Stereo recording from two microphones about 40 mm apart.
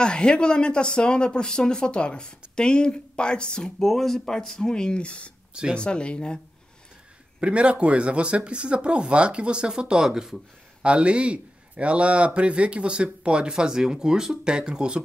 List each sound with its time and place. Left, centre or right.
0.0 s speech: left
3.6 s speech: centre; by 5.3 s left
5.5 s speech: right
5.8 s speech: left
7.3 s speech: right; by 10.4 s centre
10.8 s a man's voice: right